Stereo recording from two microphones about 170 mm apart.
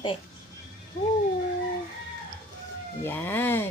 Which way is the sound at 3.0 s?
10° left (ahead or behind).